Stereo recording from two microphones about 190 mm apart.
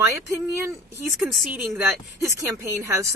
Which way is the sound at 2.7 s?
15° right (ahead or behind).